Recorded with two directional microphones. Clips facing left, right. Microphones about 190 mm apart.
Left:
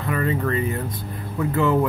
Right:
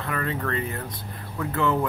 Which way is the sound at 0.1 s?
5° left (ahead or behind).